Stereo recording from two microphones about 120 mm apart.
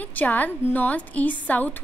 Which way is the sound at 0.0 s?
15° left (ahead or behind).